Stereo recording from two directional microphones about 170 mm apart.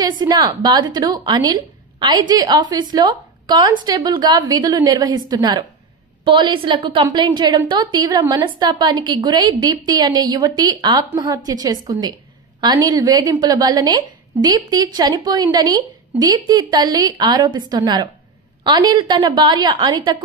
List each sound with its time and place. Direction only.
0.2 s a woman's voice: 25° right (ahead or behind)